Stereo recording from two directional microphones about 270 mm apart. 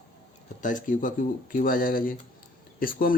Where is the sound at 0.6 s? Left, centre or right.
Left.